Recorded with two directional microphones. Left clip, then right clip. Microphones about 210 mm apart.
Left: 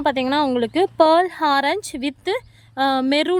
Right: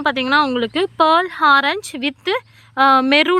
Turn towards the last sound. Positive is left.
turn(degrees=5)  # may be behind; listen again after turning